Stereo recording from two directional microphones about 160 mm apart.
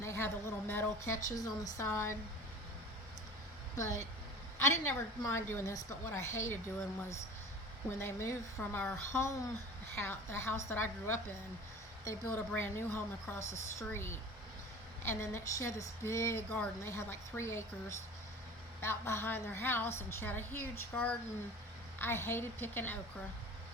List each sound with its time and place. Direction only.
0.0 s a woman's voice: 15° left (ahead or behind)
3.8 s a woman's voice: 20° left (ahead or behind)
7.9 s a woman's voice: 15° left (ahead or behind)